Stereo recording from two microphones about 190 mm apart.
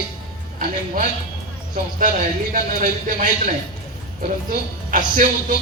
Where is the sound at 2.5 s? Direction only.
45° right (ahead or behind).